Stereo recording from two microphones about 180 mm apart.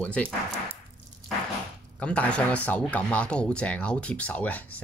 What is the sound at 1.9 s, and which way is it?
Speech, 5° left (ahead or behind).